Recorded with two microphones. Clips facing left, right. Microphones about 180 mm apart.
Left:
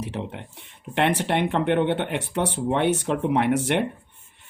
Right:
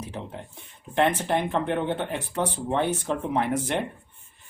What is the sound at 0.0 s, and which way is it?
Speech, 70° left (ahead or behind).